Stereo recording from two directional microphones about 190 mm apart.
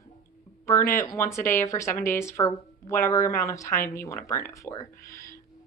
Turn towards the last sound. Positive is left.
turn(degrees=15)  # may be behind; listen again after turning